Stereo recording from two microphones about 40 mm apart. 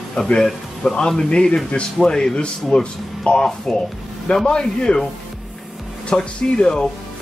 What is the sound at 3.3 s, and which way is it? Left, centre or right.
Speech, left.